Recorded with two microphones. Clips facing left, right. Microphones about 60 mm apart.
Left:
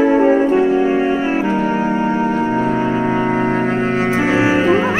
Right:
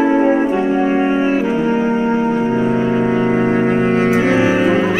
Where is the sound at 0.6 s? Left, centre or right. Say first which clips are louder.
Even; centre.